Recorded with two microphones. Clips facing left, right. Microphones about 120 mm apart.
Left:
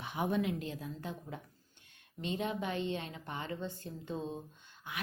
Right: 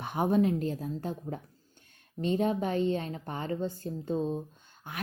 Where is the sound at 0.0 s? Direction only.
45° right (ahead or behind).